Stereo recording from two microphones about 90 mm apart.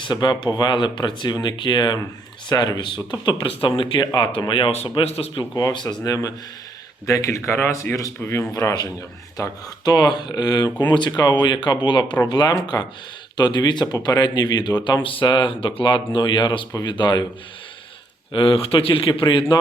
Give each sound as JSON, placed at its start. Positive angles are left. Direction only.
{"t": 0.0, "sound": "speech", "side_deg": 55}
{"t": 4.0, "sound": "speech", "side_deg": 50}
{"t": 4.4, "sound": "speech", "side_deg": 70}
{"t": 5.5, "sound": "speech", "side_deg": 50}
{"t": 6.1, "sound": "speech", "side_deg": 40}
{"t": 18.3, "sound": "a man's voice", "side_deg": 80}